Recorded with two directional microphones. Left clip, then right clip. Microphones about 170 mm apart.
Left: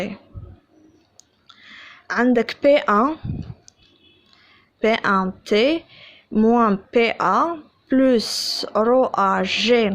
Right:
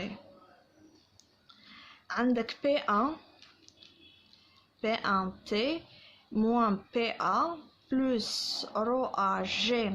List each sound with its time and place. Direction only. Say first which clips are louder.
1.1 s clicking: left 10 dB; 35° left (ahead or behind)
2.3 s speech: left 15 dB; 40° left (ahead or behind)
4.8 s speech: left 11 dB; 45° left (ahead or behind)
6.3 s speech: left 11 dB; 25° left (ahead or behind)
6.9 s speech: left 14 dB; 40° left (ahead or behind)